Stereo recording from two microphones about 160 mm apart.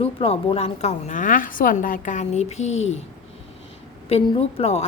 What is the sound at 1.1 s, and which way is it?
A woman's voice, 55° left (ahead or behind).